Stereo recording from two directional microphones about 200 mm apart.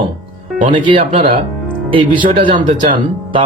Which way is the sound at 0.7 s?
25° right (ahead or behind).